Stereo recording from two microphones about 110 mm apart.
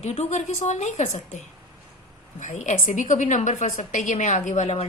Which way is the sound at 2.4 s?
90° left.